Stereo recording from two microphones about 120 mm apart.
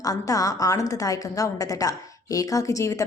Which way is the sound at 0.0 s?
30° left (ahead or behind).